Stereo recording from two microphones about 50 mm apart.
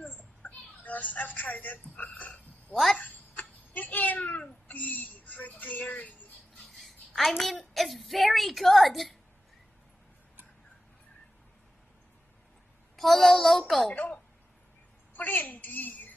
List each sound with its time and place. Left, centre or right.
0.8 s speech: left
2.7 s a child's voice: centre
3.0 s a sound: left
6.8 s a woman's voice: centre
12.9 s a child's voice: centre
15.1 s a child's voice: left